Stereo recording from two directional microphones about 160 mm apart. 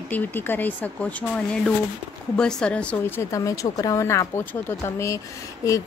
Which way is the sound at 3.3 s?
20° left (ahead or behind).